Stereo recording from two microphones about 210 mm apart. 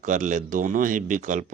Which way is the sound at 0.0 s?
35° right (ahead or behind).